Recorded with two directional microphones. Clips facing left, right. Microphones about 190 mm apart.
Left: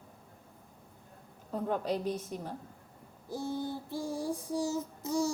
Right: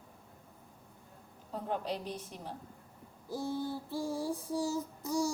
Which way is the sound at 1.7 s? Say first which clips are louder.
Left 4 dB; 45° left (ahead or behind).